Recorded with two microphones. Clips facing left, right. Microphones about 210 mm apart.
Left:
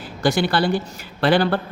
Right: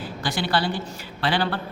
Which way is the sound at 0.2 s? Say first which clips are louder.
Left 6 dB; 45° left (ahead or behind).